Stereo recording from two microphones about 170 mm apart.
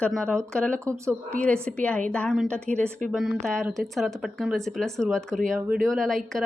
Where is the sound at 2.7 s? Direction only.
45° right (ahead or behind).